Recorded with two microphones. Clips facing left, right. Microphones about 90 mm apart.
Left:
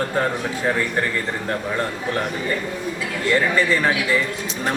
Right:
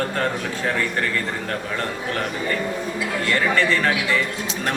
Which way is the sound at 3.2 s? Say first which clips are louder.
Left 2 dB; 15° left (ahead or behind).